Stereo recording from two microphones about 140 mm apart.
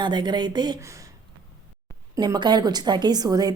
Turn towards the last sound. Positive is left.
turn(degrees=-30)  # may be behind; listen again after turning